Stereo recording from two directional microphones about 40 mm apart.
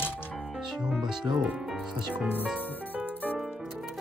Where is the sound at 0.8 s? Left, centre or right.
Centre.